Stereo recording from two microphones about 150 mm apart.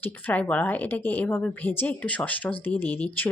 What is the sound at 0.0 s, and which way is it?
A woman's voice, 10° left (ahead or behind).